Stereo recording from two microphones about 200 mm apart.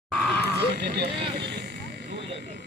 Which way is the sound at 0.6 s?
55° right (ahead or behind).